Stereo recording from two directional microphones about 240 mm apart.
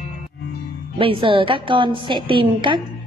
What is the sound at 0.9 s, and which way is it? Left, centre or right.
A woman's voice, right.